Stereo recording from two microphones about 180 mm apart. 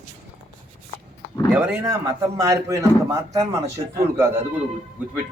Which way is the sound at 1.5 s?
10° right (ahead or behind).